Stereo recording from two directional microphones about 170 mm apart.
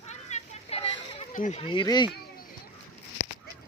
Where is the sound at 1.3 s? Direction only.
50° left (ahead or behind).